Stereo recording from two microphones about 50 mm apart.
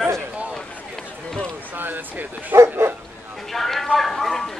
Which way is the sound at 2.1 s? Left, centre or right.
Right.